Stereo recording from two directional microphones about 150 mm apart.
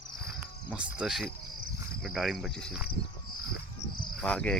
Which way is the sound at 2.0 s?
Centre (ahead or behind).